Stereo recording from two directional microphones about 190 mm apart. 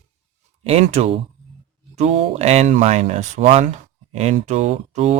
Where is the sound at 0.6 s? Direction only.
35° right (ahead or behind).